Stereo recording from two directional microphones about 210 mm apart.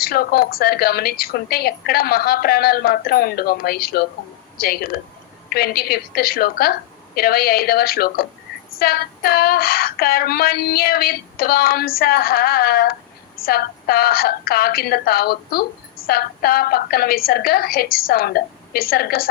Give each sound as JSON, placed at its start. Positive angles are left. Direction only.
{"t": 0.0, "sound": "a woman's voice", "side_deg": 45}